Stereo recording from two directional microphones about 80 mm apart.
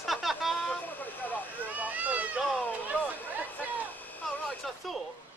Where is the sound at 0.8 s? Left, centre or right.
Left.